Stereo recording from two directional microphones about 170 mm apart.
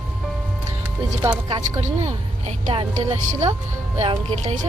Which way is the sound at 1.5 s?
25° right (ahead or behind).